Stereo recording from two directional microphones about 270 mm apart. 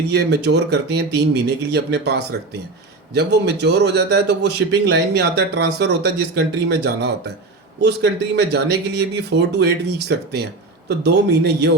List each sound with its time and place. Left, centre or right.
0.1 s a man's voice: right